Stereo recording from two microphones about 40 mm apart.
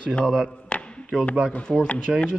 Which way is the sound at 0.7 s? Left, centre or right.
Left.